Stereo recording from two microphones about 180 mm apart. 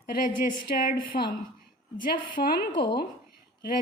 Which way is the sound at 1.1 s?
55° left (ahead or behind).